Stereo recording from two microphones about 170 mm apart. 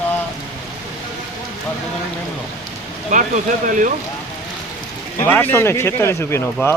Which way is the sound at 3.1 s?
50° right (ahead or behind).